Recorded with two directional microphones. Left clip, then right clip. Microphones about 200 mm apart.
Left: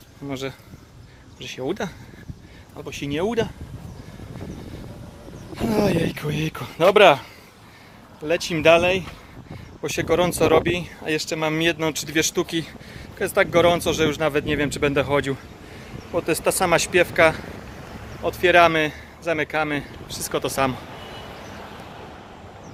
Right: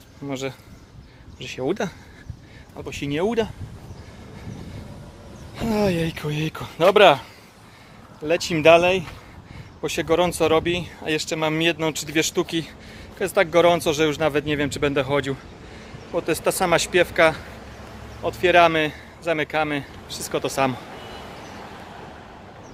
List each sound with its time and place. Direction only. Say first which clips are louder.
0.3 s speech: right 1 dB; 20° right (ahead or behind)
5.5 s speech: left 1 dB; 10° right (ahead or behind)
8.2 s speech: right 1 dB; 20° right (ahead or behind)
9.8 s speech: even; 15° right (ahead or behind)
20.9 s vehicle: even; 55° right (ahead or behind)